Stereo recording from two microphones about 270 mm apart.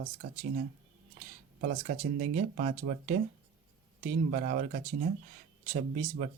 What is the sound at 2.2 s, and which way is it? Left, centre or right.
Speech, right.